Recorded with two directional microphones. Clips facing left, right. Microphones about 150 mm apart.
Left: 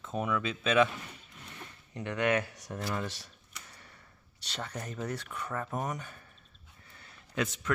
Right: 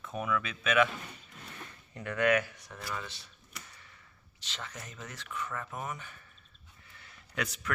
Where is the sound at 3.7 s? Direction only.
40° left (ahead or behind).